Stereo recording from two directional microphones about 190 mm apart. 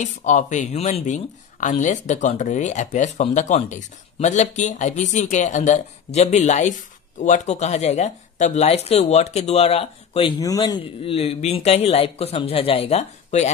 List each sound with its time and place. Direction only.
0.0 s speech: 40° left (ahead or behind)
10.4 s speech: 20° left (ahead or behind)
11.0 s speech: 30° left (ahead or behind)